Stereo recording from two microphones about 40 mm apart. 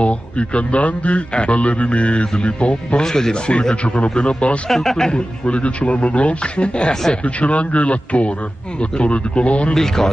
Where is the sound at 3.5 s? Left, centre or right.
Left.